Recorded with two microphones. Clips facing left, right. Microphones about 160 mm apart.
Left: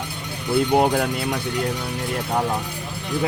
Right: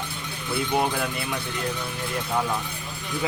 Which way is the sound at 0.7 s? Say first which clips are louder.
Left 5 dB; 55° left (ahead or behind).